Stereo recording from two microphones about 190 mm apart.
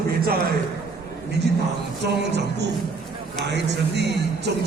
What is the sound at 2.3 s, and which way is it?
Speech, 65° right (ahead or behind).